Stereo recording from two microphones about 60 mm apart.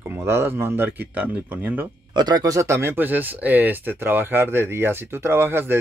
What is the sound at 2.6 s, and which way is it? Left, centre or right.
A man's voice, right.